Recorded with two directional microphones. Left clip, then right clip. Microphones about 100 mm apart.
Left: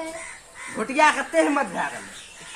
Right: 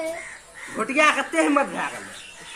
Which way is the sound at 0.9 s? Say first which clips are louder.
Even; 15° left (ahead or behind).